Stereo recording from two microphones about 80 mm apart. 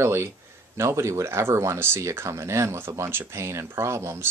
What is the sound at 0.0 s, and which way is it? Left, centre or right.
Speech, right.